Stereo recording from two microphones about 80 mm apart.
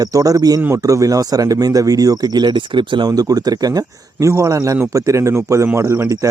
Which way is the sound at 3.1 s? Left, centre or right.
Right.